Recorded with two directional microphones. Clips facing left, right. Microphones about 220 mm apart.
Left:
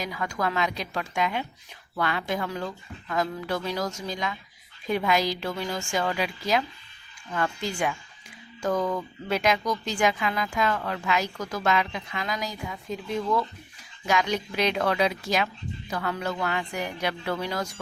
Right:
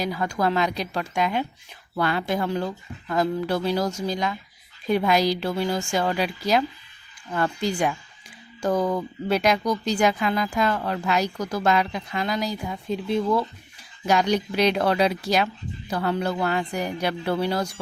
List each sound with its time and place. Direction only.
0.0 s speech: 35° right (ahead or behind)